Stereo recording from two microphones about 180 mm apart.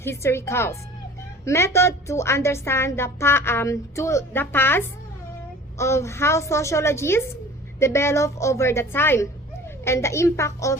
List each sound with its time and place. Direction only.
0.0 s a woman's voice: 15° left (ahead or behind)